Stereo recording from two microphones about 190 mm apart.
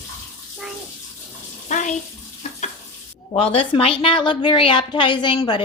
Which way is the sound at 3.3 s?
30° left (ahead or behind).